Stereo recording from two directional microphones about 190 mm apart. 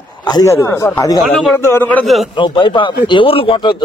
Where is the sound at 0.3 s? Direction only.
15° left (ahead or behind).